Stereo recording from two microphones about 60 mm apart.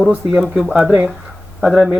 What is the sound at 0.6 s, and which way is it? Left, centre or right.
Speech, centre.